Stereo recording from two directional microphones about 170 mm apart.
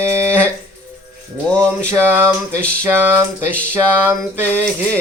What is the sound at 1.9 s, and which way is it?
Speech, 15° right (ahead or behind).